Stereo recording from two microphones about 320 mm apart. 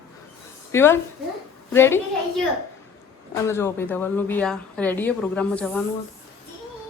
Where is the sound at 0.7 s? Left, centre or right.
Centre.